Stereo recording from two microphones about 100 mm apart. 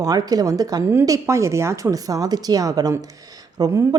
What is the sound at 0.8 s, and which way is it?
A woman's voice, 25° right (ahead or behind).